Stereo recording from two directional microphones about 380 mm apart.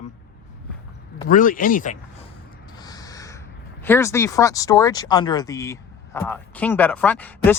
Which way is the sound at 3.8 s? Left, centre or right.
Centre.